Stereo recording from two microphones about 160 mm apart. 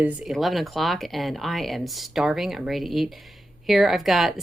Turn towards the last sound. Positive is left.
turn(degrees=0)  # may be behind; listen again after turning